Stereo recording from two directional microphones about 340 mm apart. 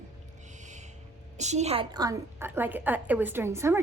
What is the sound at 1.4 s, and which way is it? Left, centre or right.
A woman's voice, centre.